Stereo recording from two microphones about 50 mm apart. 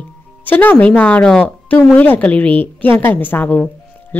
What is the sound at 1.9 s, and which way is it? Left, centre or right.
Speech, left.